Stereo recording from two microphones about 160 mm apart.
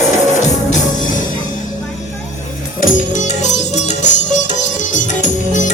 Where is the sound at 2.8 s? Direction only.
50° left (ahead or behind).